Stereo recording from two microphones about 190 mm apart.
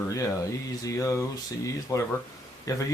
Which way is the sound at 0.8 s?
15° left (ahead or behind).